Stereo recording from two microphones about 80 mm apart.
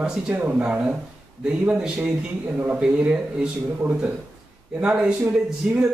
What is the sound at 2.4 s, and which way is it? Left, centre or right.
Speech, centre.